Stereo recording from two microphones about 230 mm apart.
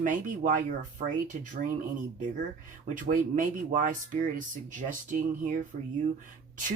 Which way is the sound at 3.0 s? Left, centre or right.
Right.